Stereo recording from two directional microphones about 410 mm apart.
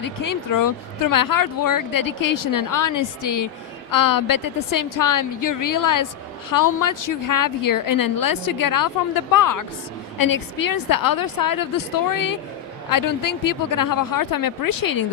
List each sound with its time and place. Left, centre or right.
0.0 s a woman's voice: left